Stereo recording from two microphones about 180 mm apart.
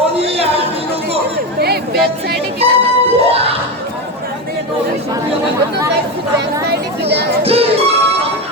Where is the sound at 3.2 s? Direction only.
35° right (ahead or behind).